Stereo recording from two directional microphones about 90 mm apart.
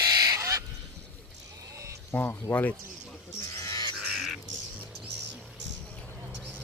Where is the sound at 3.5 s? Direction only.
40° left (ahead or behind).